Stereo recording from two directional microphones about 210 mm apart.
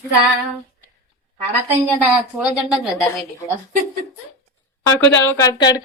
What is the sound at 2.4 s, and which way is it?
Speech, 5° right (ahead or behind).